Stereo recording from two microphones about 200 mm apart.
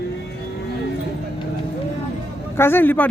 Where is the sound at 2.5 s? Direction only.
10° left (ahead or behind).